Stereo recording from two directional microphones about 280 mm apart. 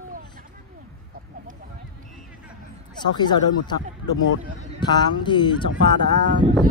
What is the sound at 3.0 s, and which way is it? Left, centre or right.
Speech, centre.